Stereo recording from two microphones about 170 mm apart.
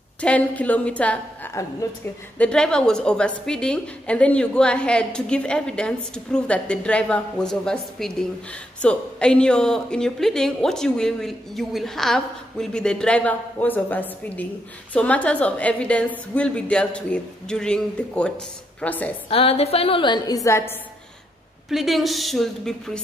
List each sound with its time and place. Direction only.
0.2 s a woman's voice: 10° left (ahead or behind)
19.2 s a woman's voice: 35° left (ahead or behind); by 20.7 s 15° left (ahead or behind)
21.6 s a woman's voice: centre (ahead or behind)